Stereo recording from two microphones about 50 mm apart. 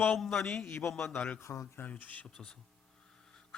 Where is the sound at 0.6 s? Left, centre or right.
Left.